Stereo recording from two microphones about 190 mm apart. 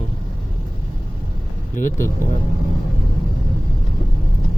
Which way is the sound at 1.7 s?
45° left (ahead or behind).